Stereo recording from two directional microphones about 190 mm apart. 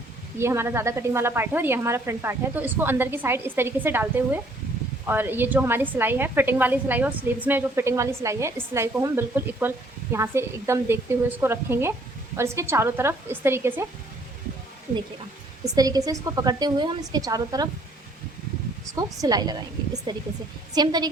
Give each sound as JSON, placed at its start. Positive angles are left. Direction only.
{"t": 0.3, "sound": "a woman's voice", "side_deg": -15}
{"t": 15.7, "sound": "a woman's voice", "side_deg": -20}
{"t": 18.9, "sound": "a woman's voice", "side_deg": -20}